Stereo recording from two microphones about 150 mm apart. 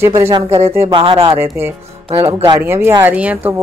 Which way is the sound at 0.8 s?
35° right (ahead or behind).